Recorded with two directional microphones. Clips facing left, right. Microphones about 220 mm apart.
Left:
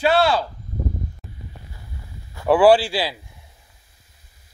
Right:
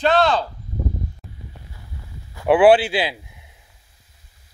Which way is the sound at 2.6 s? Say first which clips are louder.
Right 1 dB; 20° right (ahead or behind).